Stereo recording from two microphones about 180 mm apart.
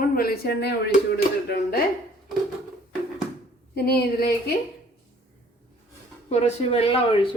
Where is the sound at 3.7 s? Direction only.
60° left (ahead or behind).